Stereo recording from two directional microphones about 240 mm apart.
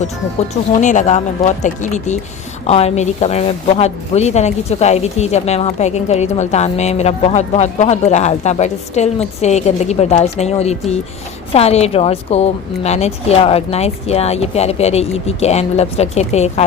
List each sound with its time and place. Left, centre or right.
0.7 s speech: left